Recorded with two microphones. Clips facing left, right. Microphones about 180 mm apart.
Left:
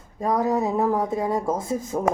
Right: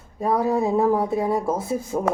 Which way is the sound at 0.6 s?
15° right (ahead or behind).